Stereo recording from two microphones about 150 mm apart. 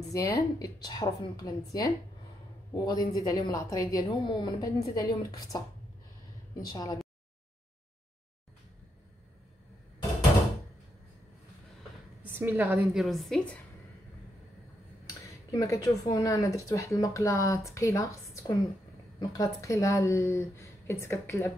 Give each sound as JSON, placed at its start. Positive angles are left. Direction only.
{"t": 0.1, "sound": "speech", "side_deg": 25}
{"t": 6.7, "sound": "speech", "side_deg": 25}
{"t": 12.2, "sound": "a woman's voice", "side_deg": -10}
{"t": 13.0, "sound": "a woman's voice", "side_deg": 0}
{"t": 15.5, "sound": "speech", "side_deg": 25}